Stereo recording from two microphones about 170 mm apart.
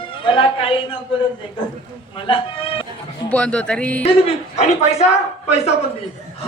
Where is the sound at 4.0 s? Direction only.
40° left (ahead or behind).